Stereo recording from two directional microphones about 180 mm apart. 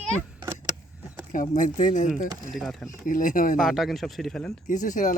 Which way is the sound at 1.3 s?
45° left (ahead or behind).